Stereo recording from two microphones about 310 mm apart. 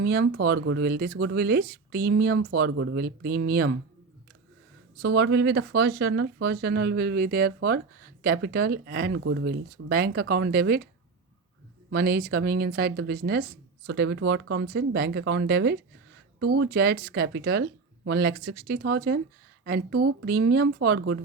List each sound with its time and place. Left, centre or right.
0.0 s speech: right
2.6 s speech: right
5.1 s speech: right
11.9 s speech: right